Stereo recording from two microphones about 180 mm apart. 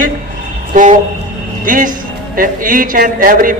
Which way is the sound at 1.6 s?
50° right (ahead or behind).